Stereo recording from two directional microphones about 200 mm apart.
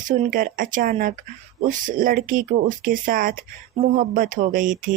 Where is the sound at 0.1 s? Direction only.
45° right (ahead or behind).